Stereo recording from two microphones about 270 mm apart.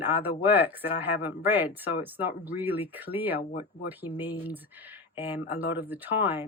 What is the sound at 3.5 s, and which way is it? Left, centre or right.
Speech, left.